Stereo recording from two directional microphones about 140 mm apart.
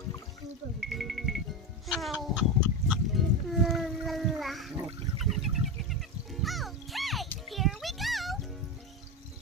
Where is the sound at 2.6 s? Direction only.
5° right (ahead or behind).